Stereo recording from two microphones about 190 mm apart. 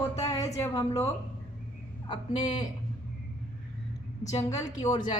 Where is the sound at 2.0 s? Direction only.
25° left (ahead or behind).